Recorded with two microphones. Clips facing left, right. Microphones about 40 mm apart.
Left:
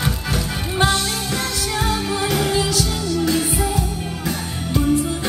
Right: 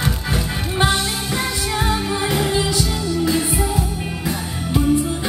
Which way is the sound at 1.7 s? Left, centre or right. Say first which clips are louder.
Right 1 dB; centre.